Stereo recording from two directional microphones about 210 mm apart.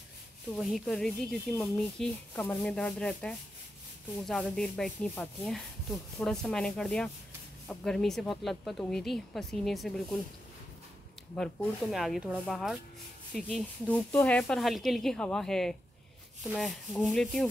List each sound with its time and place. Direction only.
0.6 s speech: centre (ahead or behind)
11.3 s speech: centre (ahead or behind)